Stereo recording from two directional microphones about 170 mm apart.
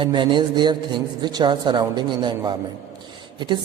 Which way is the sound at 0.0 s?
25° right (ahead or behind).